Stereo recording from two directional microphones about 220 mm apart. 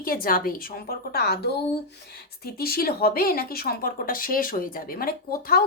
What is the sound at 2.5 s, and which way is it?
A woman's voice, 45° left (ahead or behind).